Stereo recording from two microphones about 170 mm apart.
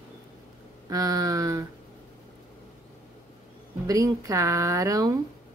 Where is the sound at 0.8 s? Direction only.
20° right (ahead or behind).